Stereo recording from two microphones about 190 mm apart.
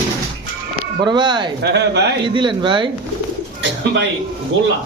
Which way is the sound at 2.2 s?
25° right (ahead or behind).